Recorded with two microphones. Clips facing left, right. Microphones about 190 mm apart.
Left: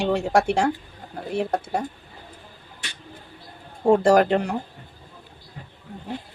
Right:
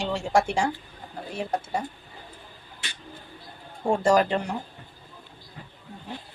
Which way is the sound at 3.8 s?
60° left (ahead or behind).